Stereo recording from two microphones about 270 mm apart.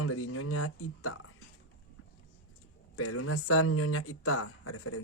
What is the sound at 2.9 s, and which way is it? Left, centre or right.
Speech, left.